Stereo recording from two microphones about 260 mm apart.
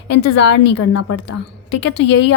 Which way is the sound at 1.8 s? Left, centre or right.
Left.